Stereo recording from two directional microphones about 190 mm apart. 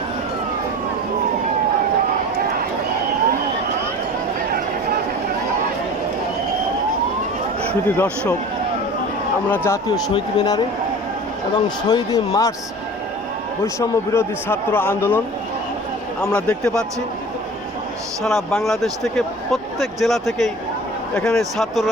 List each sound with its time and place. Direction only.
7.9 s speech: 10° left (ahead or behind)
9.5 s speech: 15° left (ahead or behind)
13.7 s speech: 15° left (ahead or behind)
16.3 s speech: 5° left (ahead or behind)
18.2 s speech: centre (ahead or behind)